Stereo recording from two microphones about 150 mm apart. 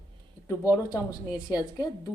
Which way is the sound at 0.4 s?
20° left (ahead or behind).